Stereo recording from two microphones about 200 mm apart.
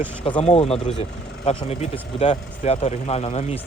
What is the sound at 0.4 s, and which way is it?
Speech, 30° left (ahead or behind).